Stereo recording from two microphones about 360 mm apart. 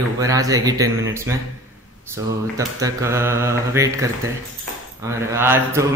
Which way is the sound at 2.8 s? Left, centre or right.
Centre.